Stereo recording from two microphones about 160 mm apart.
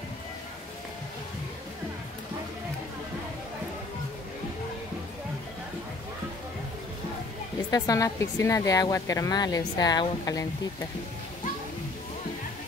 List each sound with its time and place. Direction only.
7.7 s speech: 20° left (ahead or behind)